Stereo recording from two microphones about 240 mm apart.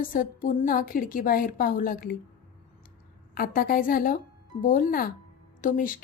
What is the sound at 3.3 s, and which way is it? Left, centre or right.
A woman's voice, left.